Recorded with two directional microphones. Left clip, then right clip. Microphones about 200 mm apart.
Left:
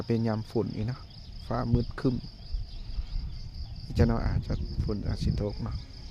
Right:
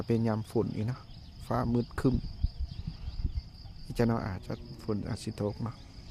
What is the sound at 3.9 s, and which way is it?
Cricket, centre (ahead or behind).